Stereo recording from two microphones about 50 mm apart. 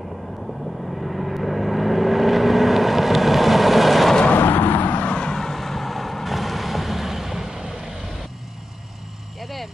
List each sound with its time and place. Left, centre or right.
0.9 s vehicle: centre
4.4 s vehicle: left
5.3 s vehicle: centre
9.4 s vehicle: centre